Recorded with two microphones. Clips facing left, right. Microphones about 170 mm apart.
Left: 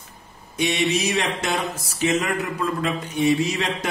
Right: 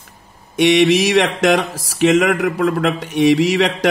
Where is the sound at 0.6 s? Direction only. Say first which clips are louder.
Right 10 dB; 80° right.